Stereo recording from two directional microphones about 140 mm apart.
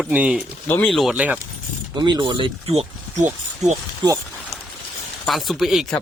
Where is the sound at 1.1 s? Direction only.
10° right (ahead or behind).